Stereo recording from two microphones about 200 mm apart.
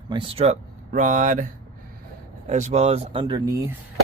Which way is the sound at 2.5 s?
35° right (ahead or behind).